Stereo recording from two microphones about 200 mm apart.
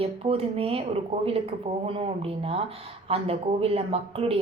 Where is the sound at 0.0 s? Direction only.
30° right (ahead or behind).